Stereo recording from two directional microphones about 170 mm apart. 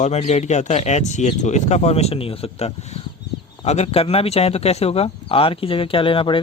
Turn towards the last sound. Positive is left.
turn(degrees=30)  # may be behind; listen again after turning